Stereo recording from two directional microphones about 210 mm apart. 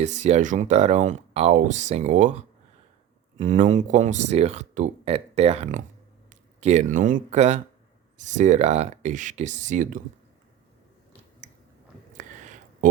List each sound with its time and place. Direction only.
0.0 s speech: 35° right (ahead or behind)
3.3 s speech: 35° right (ahead or behind)
12.1 s a sound: 35° right (ahead or behind)